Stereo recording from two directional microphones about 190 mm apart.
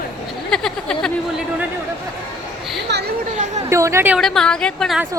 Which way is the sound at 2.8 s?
60° right (ahead or behind).